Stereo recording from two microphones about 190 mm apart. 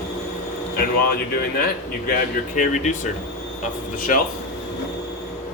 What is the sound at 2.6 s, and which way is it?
Speech, 40° left (ahead or behind).